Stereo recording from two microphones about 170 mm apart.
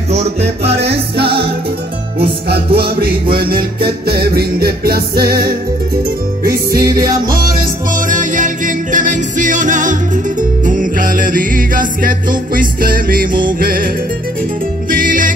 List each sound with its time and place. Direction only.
0.1 s music: 40° right (ahead or behind)
2.5 s music: 65° right (ahead or behind)
7.9 s music: 50° right (ahead or behind)
14.9 s music: 50° right (ahead or behind)